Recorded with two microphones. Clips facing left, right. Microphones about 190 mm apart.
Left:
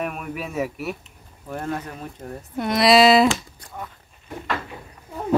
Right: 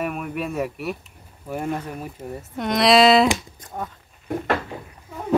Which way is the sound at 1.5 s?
10° right (ahead or behind).